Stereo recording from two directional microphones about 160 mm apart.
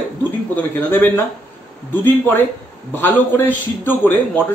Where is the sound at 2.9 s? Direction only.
15° left (ahead or behind).